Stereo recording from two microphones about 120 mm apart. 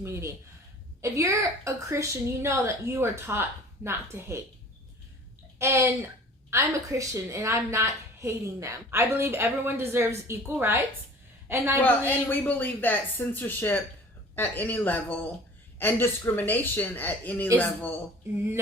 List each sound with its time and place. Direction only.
0.0 s a woman's voice: 25° right (ahead or behind)
5.5 s a woman's voice: 20° right (ahead or behind)
11.8 s speech: 15° left (ahead or behind)